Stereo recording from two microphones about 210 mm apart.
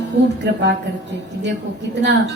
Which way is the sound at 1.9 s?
55° right (ahead or behind).